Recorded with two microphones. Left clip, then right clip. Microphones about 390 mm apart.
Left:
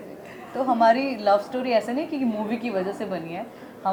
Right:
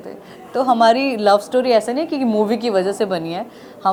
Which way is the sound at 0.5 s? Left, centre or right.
Right.